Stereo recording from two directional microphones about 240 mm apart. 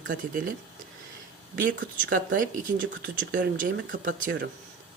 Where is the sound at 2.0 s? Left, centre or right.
Right.